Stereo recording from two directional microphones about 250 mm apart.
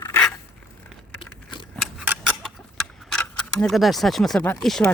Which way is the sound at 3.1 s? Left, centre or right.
Centre.